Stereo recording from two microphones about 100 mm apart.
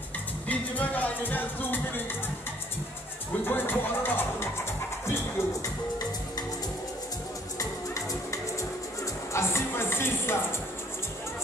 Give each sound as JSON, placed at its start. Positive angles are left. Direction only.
{"t": 0.5, "sound": "music", "side_deg": 15}
{"t": 3.4, "sound": "music", "side_deg": 20}
{"t": 7.5, "sound": "music", "side_deg": 35}